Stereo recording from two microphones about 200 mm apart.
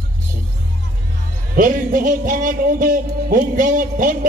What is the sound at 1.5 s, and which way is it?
Music, 45° right (ahead or behind).